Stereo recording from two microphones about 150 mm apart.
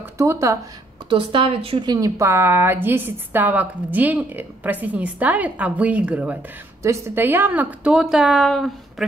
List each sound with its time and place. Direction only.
0.0 s speech: 20° right (ahead or behind)
1.0 s a woman's voice: 35° right (ahead or behind); by 9.0 s centre (ahead or behind)